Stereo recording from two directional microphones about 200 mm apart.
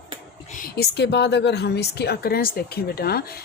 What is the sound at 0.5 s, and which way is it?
A woman's voice, 50° left (ahead or behind).